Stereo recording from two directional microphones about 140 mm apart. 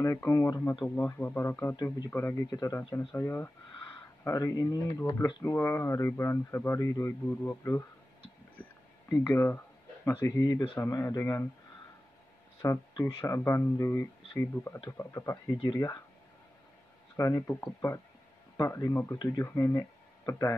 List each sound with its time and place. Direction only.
0.0 s speech: 20° left (ahead or behind)
1.8 s speech: 25° left (ahead or behind)
5.4 s speech: 15° left (ahead or behind)
9.1 s speech: 15° left (ahead or behind)
12.6 s speech: 20° left (ahead or behind)
17.2 s speech: 20° left (ahead or behind)